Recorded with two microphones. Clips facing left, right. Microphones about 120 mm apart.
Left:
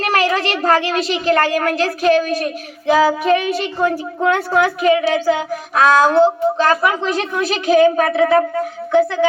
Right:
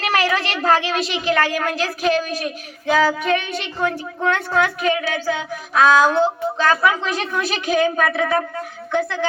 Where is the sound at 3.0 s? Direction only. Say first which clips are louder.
Left 4 dB; 30° left (ahead or behind).